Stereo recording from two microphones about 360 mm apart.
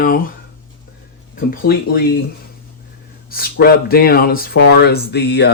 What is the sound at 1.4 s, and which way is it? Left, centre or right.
Speech, left.